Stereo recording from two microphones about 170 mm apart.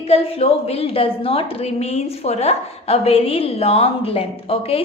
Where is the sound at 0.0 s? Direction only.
35° left (ahead or behind).